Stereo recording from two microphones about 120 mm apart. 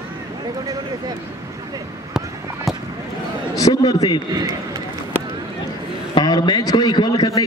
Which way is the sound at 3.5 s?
30° left (ahead or behind).